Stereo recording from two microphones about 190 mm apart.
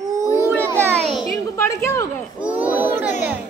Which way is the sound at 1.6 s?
15° left (ahead or behind).